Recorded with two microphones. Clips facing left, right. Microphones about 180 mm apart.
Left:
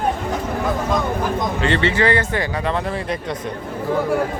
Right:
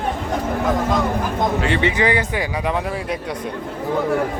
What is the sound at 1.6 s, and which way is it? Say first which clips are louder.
Speech: left 4 dB; 10° right (ahead or behind).